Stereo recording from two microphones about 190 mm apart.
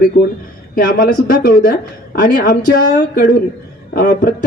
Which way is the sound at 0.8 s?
50° left (ahead or behind).